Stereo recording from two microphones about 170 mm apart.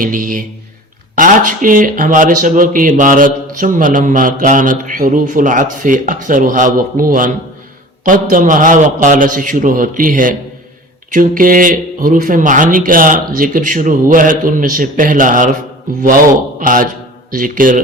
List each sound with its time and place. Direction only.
0.0 s speech: 55° right (ahead or behind)